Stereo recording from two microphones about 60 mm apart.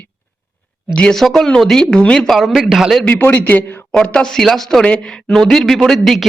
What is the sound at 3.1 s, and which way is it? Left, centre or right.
Speech, left.